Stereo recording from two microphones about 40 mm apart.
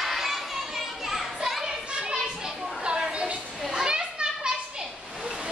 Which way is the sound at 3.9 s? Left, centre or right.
Right.